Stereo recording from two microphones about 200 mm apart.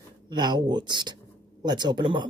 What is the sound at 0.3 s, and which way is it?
A woman's voice, 20° right (ahead or behind).